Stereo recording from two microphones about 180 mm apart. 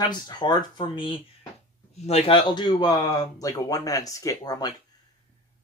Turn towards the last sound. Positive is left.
turn(degrees=20)  # may be behind; listen again after turning